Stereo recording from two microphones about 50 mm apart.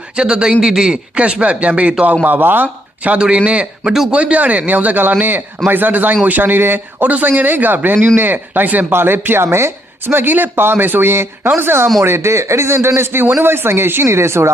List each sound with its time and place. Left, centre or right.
0.2 s speech: centre
1.1 s speech: right
2.2 s speech: right
3.2 s a man's voice: centre; by 7.8 s right
7.9 s a man's voice: right
8.9 s speech: right
10.2 s speech: right